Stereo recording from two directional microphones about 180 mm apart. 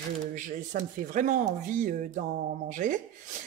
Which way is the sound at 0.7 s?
50° right (ahead or behind).